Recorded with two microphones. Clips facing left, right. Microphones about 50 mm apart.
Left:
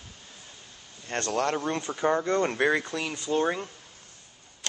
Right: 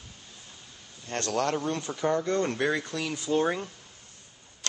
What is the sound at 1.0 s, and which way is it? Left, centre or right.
Speech, left.